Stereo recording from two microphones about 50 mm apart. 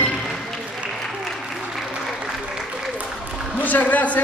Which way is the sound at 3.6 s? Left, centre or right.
Left.